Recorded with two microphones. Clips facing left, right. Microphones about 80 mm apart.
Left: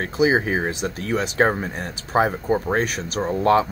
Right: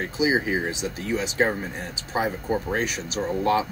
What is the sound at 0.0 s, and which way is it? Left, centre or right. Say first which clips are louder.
Speech: left 4 dB; left.